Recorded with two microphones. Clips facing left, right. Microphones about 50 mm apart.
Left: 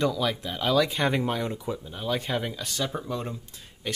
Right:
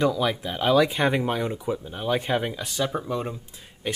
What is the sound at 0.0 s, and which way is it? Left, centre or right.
Speech, centre.